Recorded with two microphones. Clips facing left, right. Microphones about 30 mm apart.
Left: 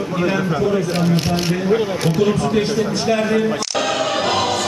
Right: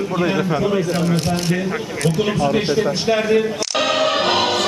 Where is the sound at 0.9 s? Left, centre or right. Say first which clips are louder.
Left 1 dB; centre.